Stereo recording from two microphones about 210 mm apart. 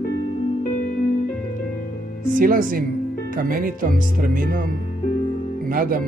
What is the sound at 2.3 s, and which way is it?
Speech, 40° right (ahead or behind).